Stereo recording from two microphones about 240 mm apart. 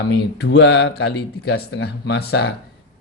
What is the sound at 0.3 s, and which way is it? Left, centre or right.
Speech, left.